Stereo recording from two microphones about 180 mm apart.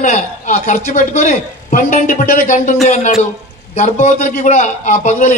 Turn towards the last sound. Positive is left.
turn(degrees=45)  # may be behind; listen again after turning